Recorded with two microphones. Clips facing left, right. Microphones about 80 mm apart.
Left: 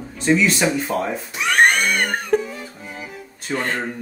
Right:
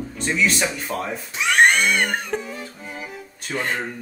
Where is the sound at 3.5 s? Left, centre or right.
Centre.